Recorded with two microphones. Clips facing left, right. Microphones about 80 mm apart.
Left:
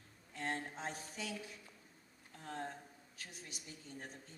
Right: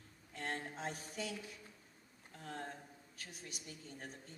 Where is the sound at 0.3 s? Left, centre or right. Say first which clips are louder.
Left 1 dB; left.